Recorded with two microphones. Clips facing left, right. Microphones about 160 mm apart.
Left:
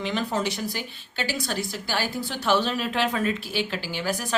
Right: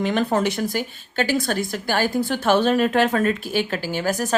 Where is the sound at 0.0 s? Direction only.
55° right (ahead or behind).